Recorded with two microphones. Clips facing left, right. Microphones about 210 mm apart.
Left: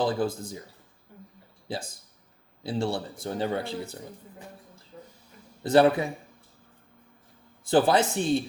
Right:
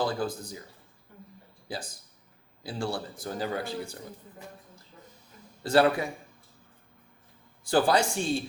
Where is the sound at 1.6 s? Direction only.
25° left (ahead or behind).